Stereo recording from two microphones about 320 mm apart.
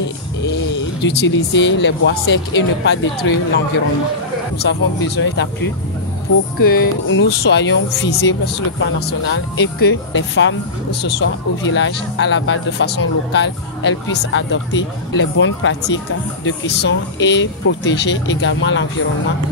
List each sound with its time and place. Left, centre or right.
1.0 s speech: left
4.6 s speech: left